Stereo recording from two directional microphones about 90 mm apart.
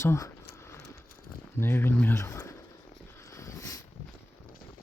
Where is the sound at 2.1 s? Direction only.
35° left (ahead or behind).